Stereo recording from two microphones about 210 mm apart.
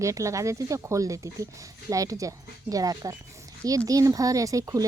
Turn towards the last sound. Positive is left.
turn(degrees=-15)  # may be behind; listen again after turning